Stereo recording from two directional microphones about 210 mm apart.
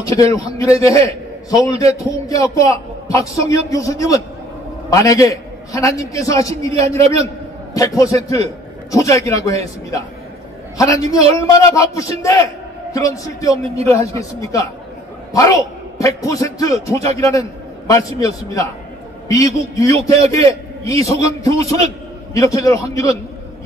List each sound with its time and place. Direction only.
0.0 s a man's voice: 15° left (ahead or behind)
10.8 s a man's voice: 15° left (ahead or behind)
16.0 s a man's voice: 15° left (ahead or behind)